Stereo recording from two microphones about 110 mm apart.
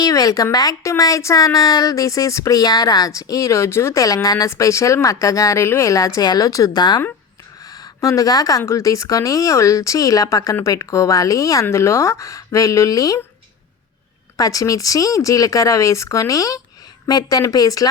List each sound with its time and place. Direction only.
0.0 s speech: 35° left (ahead or behind)
14.3 s speech: 30° left (ahead or behind)